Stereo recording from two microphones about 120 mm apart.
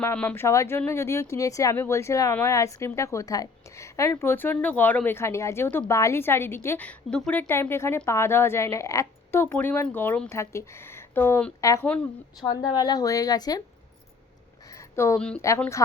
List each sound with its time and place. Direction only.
0.0 s speech: 15° left (ahead or behind)
0.4 s speech: 25° left (ahead or behind)
11.6 s a woman's voice: 25° left (ahead or behind)
14.9 s a woman's voice: 20° left (ahead or behind)